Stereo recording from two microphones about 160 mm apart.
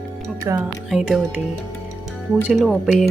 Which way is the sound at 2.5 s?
Centre (ahead or behind).